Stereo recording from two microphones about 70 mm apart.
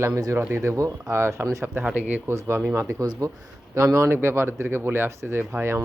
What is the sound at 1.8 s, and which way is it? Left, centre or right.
Speech, right.